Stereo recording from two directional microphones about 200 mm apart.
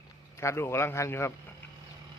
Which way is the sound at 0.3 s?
15° left (ahead or behind).